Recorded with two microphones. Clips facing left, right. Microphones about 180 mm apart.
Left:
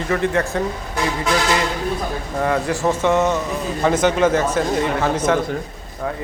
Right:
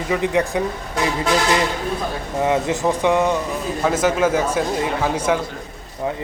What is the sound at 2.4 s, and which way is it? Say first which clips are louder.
A man's voice: right 1 dB; 20° right (ahead or behind).